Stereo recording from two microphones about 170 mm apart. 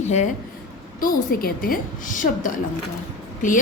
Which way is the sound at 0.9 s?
55° left (ahead or behind).